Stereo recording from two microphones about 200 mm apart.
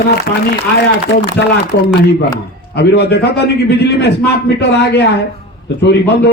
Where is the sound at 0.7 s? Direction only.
55° left (ahead or behind).